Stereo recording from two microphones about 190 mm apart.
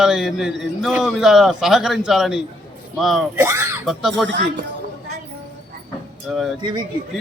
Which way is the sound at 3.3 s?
15° right (ahead or behind).